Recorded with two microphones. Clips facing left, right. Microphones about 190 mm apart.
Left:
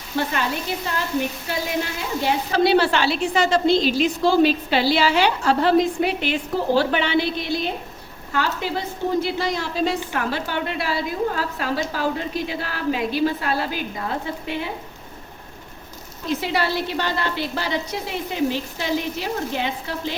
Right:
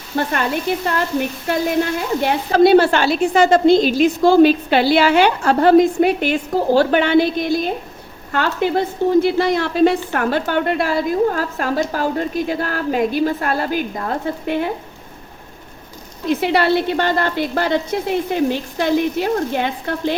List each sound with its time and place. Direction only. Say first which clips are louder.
0.1 s a woman's voice: right 4 dB; 50° right (ahead or behind)
8.3 s a woman's voice: right 6 dB; 55° right (ahead or behind)
16.3 s a woman's voice: right 7 dB; 60° right (ahead or behind)